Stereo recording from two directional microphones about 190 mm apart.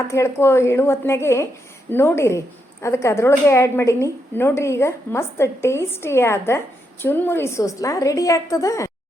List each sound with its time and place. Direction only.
0.1 s a woman's voice: 15° left (ahead or behind)